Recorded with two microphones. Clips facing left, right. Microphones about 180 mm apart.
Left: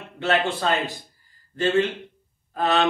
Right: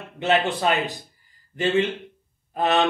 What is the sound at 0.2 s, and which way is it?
Speech, 20° right (ahead or behind).